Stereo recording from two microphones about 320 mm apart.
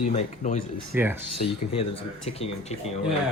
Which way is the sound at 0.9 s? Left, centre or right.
Centre.